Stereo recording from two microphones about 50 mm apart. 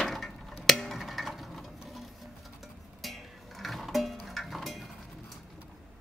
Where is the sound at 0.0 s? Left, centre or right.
Centre.